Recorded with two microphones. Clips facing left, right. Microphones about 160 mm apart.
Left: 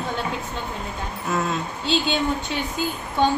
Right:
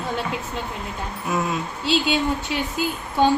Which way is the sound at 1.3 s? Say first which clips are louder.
Even; 10° right (ahead or behind).